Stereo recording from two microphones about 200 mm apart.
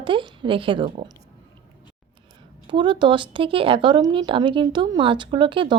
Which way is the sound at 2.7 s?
25° right (ahead or behind).